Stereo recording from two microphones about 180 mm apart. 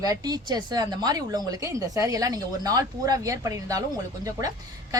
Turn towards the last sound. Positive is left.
turn(degrees=-20)  # may be behind; listen again after turning